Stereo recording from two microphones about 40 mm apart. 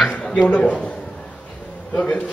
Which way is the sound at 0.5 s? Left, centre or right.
Left.